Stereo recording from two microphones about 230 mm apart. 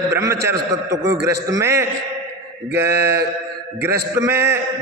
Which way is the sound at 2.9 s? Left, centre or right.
Right.